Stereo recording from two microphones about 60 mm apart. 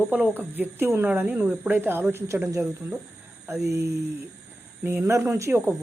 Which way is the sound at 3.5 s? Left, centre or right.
Right.